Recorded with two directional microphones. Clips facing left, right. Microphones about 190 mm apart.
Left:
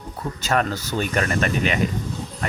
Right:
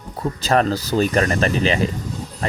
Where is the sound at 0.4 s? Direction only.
35° right (ahead or behind).